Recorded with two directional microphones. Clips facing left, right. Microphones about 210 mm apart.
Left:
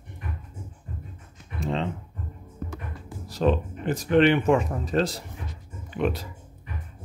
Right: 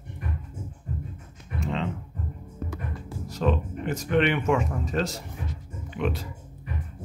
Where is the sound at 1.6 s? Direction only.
35° left (ahead or behind).